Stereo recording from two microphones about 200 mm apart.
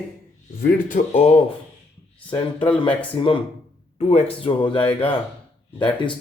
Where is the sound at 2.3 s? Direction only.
25° left (ahead or behind).